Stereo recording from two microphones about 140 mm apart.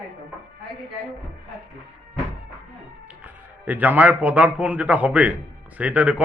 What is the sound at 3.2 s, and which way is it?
A man's voice, 10° right (ahead or behind).